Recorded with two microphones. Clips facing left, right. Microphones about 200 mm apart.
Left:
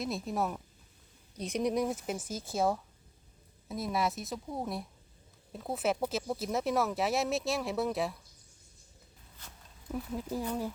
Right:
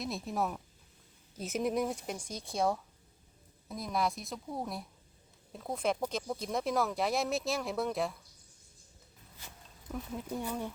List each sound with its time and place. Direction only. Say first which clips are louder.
0.0 s speech: left 2 dB; centre (ahead or behind)
9.9 s speech: left 3 dB; centre (ahead or behind)